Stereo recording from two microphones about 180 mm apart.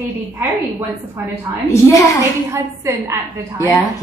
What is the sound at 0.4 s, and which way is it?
Speech, 10° right (ahead or behind).